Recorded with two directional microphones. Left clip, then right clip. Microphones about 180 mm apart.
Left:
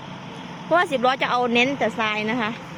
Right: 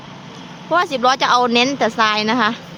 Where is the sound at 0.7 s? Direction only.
10° right (ahead or behind); by 2.5 s 30° right (ahead or behind).